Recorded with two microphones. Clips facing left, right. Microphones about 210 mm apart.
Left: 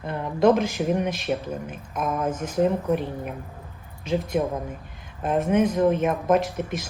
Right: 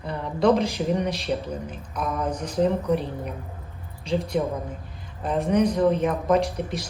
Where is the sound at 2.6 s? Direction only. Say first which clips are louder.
Even; 5° left (ahead or behind).